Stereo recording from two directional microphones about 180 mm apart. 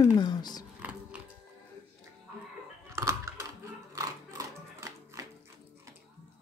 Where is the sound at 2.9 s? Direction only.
15° right (ahead or behind).